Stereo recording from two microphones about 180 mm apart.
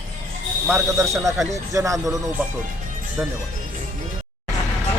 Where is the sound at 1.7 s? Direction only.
20° right (ahead or behind).